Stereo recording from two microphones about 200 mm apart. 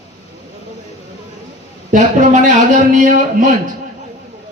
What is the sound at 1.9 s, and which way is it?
A man's voice, 40° right (ahead or behind).